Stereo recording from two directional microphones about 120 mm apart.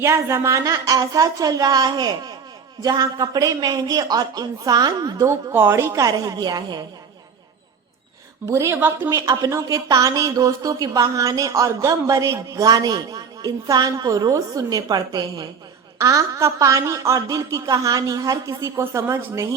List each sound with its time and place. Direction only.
0.0 s a woman's voice: 20° right (ahead or behind)
8.4 s a woman's voice: 25° right (ahead or behind)